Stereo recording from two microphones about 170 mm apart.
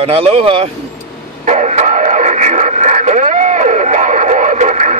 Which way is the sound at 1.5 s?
45° right (ahead or behind).